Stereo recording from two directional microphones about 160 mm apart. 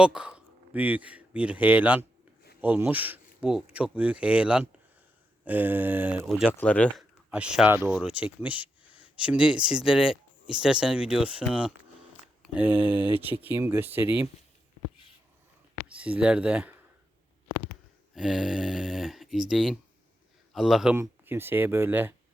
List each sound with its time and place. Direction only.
0.0 s speech: 5° right (ahead or behind)
6.5 s speech: 10° left (ahead or behind)
7.3 s speech: 5° right (ahead or behind)
12.4 s a sound: 5° right (ahead or behind)
12.9 s speech: 35° right (ahead or behind)
13.4 s speech: 15° right (ahead or behind)
16.0 s speech: 10° right (ahead or behind)
18.1 s a man's voice: centre (ahead or behind)
20.9 s speech: 15° right (ahead or behind)